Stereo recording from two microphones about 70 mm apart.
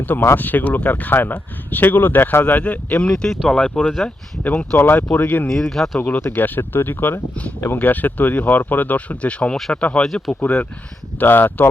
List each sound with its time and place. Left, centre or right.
0.0 s speech: left
5.5 s speech: centre
6.0 s speech: left
10.4 s speech: left